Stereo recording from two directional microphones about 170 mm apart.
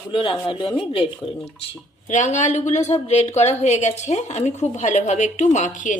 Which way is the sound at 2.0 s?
45° left (ahead or behind).